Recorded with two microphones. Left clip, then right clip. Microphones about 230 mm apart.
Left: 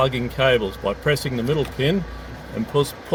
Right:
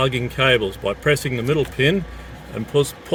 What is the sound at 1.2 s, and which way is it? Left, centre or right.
Speech, right.